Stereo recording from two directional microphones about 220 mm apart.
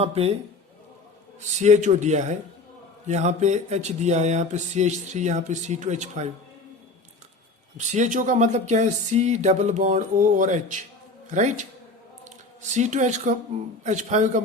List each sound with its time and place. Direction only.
0.0 s a man's voice: 25° right (ahead or behind)
1.4 s speech: 30° right (ahead or behind)
7.8 s speech: 35° right (ahead or behind)
12.7 s speech: 35° right (ahead or behind)